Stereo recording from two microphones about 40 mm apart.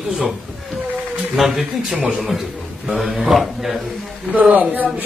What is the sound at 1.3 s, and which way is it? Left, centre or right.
Speech, centre.